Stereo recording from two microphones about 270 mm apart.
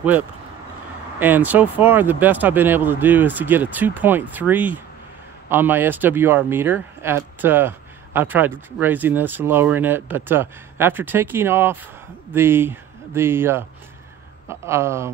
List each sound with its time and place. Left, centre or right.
1.2 s speech: centre